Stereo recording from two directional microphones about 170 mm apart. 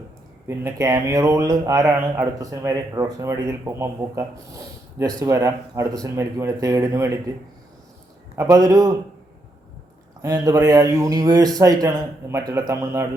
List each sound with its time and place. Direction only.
0.4 s speech: 15° right (ahead or behind)
8.4 s speech: 20° right (ahead or behind)
10.2 s speech: 20° right (ahead or behind)